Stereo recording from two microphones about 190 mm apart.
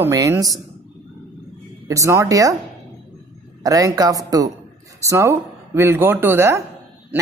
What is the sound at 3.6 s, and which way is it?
Speech, 20° right (ahead or behind).